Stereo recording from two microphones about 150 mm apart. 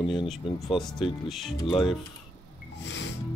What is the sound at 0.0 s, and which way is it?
Speech, 35° left (ahead or behind).